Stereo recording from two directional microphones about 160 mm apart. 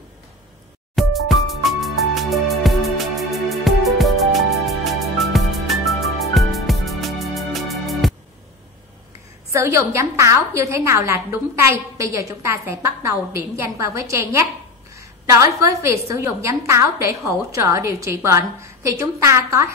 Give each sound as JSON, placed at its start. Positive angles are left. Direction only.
{"t": 0.9, "sound": "music", "side_deg": 0}
{"t": 9.5, "sound": "a woman's voice", "side_deg": -20}